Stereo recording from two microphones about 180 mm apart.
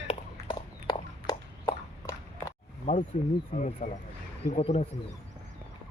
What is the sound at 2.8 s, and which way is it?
Speech, 45° left (ahead or behind).